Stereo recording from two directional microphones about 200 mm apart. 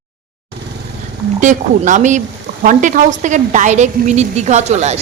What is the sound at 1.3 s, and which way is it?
A woman's voice, 40° right (ahead or behind).